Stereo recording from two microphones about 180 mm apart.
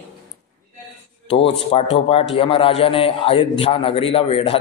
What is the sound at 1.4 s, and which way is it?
A man's voice, 35° left (ahead or behind).